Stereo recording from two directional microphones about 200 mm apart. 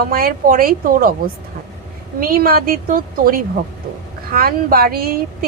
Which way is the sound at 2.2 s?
45° right (ahead or behind).